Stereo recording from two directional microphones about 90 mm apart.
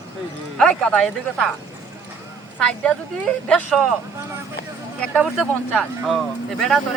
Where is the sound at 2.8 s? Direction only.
10° left (ahead or behind).